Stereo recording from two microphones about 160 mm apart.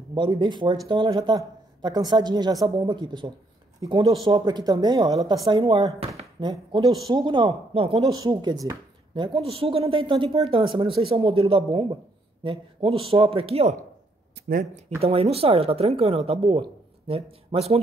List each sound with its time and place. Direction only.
0.1 s speech: 25° right (ahead or behind)
5.9 s a woman's voice: 40° right (ahead or behind)
8.1 s a woman's voice: 25° right (ahead or behind)
14.4 s a sound: 90° right
15.0 s a woman's voice: 40° right (ahead or behind)